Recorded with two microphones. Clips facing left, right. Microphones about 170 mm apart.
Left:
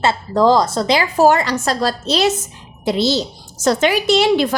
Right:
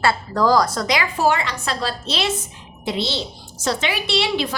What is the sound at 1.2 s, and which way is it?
A woman's voice, 40° left (ahead or behind).